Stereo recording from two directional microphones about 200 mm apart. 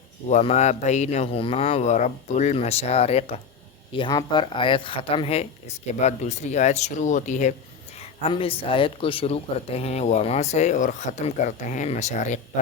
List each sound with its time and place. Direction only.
0.3 s speech: 35° left (ahead or behind)